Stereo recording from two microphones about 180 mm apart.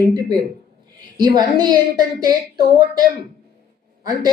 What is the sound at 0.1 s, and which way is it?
A woman's voice, 25° right (ahead or behind).